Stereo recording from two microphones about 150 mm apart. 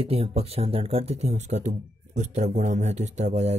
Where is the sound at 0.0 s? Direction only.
40° right (ahead or behind).